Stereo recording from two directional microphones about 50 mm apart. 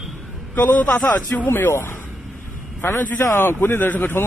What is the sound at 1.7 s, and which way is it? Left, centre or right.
Speech, left.